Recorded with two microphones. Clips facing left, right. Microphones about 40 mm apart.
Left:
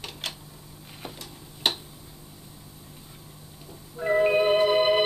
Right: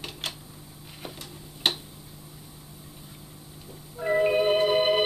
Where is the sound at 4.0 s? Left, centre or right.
Centre.